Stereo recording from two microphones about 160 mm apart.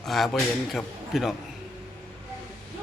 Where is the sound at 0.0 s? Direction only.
Centre (ahead or behind).